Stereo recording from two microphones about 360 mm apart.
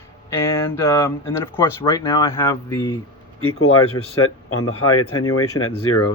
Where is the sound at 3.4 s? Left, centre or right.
Left.